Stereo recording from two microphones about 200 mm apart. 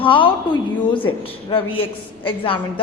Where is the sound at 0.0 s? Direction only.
25° left (ahead or behind).